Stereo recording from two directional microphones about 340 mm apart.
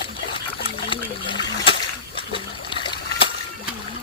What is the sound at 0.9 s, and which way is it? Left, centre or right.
Splash, centre.